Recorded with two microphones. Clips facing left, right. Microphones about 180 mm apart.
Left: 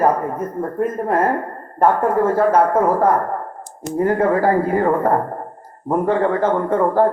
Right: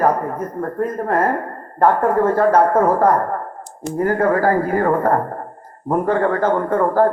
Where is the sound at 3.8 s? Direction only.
20° left (ahead or behind).